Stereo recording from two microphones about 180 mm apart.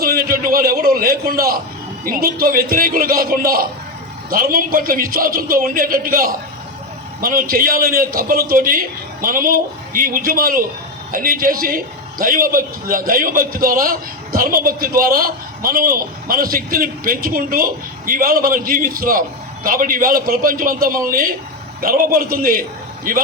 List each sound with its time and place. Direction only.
0.0 s a man's voice: 55° right (ahead or behind)